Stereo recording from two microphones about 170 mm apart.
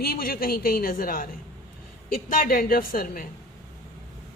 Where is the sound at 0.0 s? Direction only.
60° left (ahead or behind).